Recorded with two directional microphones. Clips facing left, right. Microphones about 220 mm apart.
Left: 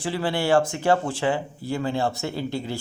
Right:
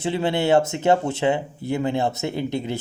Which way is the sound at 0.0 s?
25° right (ahead or behind).